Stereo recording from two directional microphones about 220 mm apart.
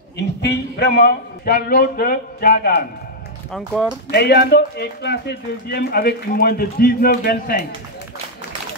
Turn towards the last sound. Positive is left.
turn(degrees=40)  # may be behind; listen again after turning